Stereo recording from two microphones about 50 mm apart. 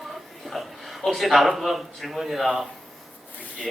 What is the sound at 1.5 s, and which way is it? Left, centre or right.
Speech, centre.